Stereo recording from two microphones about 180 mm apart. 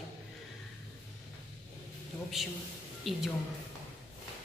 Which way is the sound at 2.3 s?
Centre (ahead or behind).